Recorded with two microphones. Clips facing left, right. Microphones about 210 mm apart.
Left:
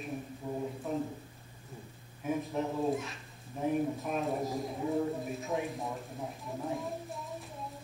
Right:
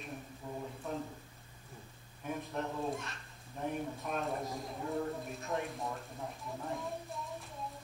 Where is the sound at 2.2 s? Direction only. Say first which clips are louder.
Left 6 dB; centre (ahead or behind).